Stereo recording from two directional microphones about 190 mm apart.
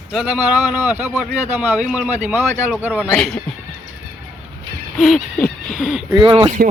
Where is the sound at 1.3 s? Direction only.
40° right (ahead or behind).